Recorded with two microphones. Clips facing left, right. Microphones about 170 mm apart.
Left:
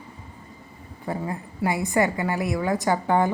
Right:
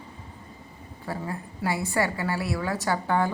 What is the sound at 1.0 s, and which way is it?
A woman's voice, 15° left (ahead or behind).